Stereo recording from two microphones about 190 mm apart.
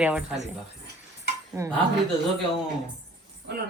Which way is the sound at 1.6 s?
15° right (ahead or behind).